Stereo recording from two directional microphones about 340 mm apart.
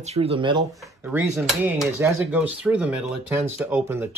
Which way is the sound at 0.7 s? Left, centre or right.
Centre.